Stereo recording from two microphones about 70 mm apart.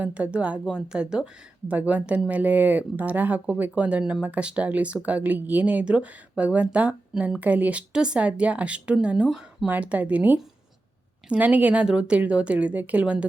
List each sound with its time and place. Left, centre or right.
0.0 s a woman's voice: centre
9.6 s speech: right